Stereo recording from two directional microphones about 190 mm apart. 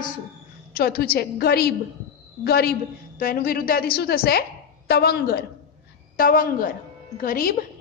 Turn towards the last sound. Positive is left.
turn(degrees=50)  # may be behind; listen again after turning